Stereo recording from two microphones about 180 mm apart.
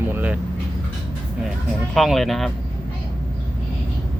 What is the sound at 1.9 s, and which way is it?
Speech, centre (ahead or behind).